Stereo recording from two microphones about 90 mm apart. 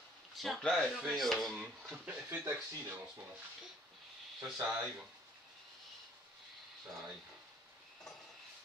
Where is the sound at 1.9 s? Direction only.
20° right (ahead or behind).